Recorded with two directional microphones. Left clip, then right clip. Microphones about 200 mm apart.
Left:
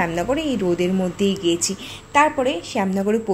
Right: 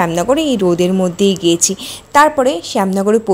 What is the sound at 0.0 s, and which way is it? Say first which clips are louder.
Speech: right 8 dB; 40° right (ahead or behind).